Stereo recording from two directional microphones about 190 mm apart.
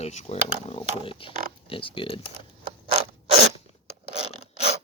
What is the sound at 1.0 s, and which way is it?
Speech, 25° left (ahead or behind).